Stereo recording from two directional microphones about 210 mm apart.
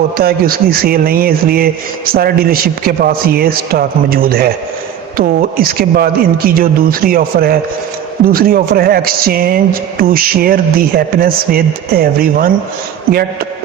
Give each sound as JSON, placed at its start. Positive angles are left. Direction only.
{"t": 0.2, "sound": "speech", "side_deg": -45}